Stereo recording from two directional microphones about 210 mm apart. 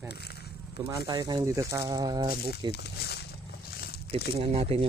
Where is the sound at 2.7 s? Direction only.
50° left (ahead or behind).